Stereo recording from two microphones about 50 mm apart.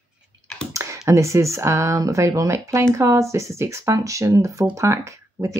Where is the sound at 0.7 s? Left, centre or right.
Right.